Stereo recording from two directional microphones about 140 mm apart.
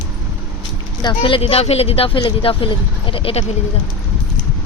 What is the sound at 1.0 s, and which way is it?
Speech, 40° left (ahead or behind).